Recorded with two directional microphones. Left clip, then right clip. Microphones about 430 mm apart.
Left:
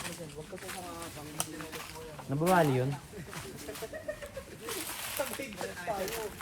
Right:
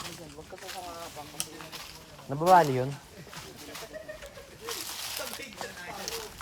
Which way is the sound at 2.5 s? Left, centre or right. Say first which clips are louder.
Right 6 dB; centre.